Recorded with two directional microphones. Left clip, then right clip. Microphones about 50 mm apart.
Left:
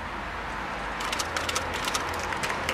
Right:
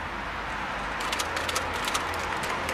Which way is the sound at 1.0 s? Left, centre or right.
Centre.